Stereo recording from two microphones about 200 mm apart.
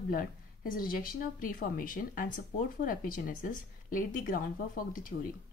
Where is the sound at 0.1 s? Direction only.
45° left (ahead or behind).